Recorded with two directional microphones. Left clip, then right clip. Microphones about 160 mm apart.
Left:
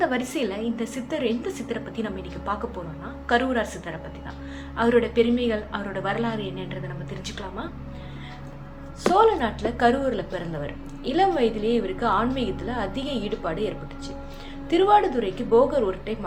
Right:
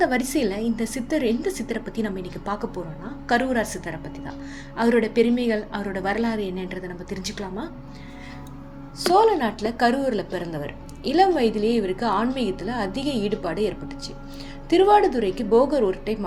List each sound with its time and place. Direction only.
0.0 s a woman's voice: 45° right (ahead or behind)
9.1 s a woman's voice: 45° right (ahead or behind)